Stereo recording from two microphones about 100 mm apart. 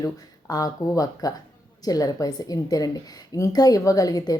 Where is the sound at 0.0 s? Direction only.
35° left (ahead or behind).